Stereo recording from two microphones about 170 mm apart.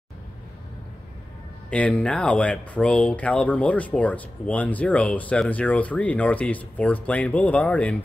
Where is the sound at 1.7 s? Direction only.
5° left (ahead or behind).